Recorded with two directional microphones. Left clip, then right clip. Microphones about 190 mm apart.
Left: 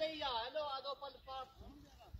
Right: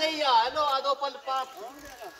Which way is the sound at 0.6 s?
65° right (ahead or behind).